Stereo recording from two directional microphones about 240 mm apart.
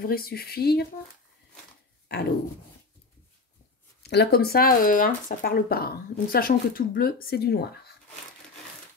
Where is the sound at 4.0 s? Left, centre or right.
Left.